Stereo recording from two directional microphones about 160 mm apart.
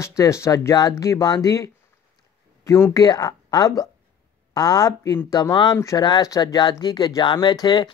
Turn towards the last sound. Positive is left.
turn(degrees=25)  # may be behind; listen again after turning